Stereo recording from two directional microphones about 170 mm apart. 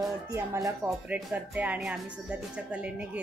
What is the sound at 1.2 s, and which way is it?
Speech, 5° right (ahead or behind).